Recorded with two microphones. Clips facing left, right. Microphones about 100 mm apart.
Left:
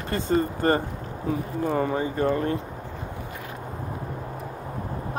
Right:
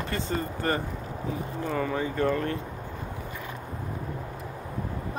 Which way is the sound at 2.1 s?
20° left (ahead or behind).